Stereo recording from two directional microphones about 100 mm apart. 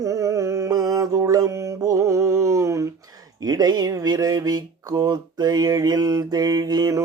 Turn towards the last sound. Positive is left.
turn(degrees=-35)  # may be behind; listen again after turning